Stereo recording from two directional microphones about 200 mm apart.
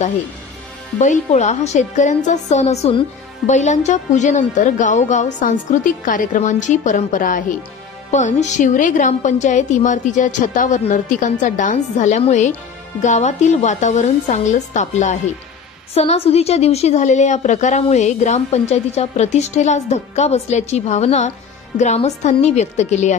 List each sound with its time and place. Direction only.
1.0 s a woman's voice: 35° left (ahead or behind)